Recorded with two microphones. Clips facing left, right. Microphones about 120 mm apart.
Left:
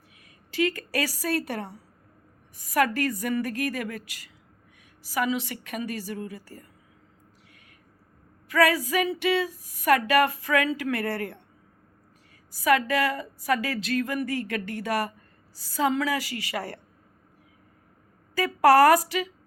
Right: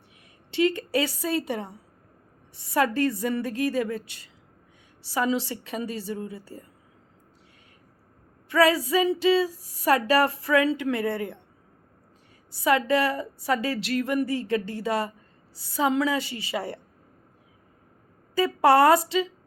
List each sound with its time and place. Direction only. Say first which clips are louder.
0.5 s speech: right 3 dB; 25° right (ahead or behind)
8.4 s speech: right 2 dB; 25° right (ahead or behind)
12.6 s speech: right 1 dB; 25° right (ahead or behind)
18.3 s speech: left 1 dB; 25° right (ahead or behind)